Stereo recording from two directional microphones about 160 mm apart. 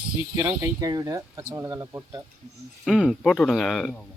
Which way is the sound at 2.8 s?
Centre (ahead or behind).